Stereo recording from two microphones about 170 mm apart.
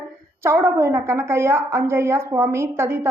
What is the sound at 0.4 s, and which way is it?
A woman's voice, 15° right (ahead or behind).